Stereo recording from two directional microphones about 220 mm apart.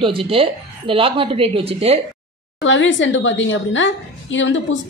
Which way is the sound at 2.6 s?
55° left (ahead or behind).